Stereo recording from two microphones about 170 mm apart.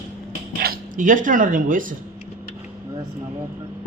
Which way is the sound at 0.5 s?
60° right (ahead or behind).